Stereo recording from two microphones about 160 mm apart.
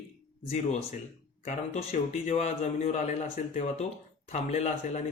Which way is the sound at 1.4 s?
45° left (ahead or behind).